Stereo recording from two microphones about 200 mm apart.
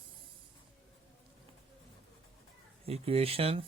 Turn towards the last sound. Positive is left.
turn(degrees=-30)  # may be behind; listen again after turning